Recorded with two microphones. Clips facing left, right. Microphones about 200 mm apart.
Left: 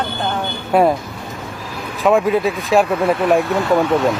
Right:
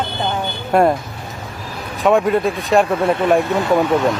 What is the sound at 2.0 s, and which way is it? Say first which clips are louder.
Speech: even; centre (ahead or behind).